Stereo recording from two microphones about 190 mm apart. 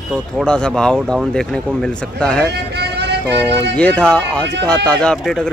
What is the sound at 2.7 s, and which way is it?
Music, 60° right (ahead or behind).